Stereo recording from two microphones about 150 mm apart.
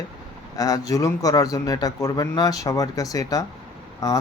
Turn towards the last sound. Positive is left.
turn(degrees=25)  # may be behind; listen again after turning